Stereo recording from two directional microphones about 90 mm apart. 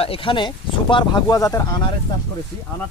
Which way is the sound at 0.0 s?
80° left.